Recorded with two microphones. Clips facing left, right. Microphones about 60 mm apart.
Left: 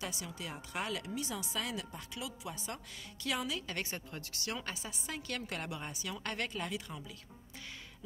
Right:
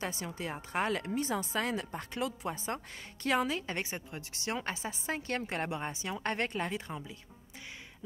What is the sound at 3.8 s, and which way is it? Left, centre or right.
A woman's voice, centre.